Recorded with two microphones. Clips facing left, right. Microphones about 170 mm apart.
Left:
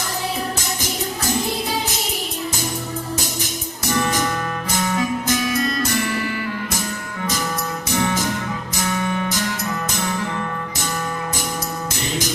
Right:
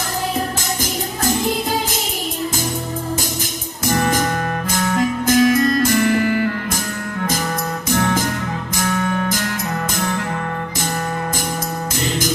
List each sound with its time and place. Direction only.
3.8 s music: 50° right (ahead or behind)
7.9 s music: 50° right (ahead or behind)